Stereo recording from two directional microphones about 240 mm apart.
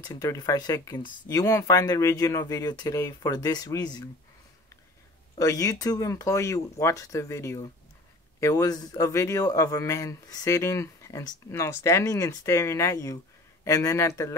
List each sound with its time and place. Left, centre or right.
0.0 s a man's voice: centre
5.4 s a man's voice: centre